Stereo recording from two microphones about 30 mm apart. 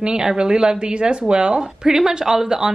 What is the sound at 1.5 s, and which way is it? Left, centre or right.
Speech, centre.